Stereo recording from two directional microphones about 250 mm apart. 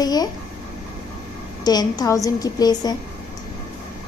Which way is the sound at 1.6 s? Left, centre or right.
Centre.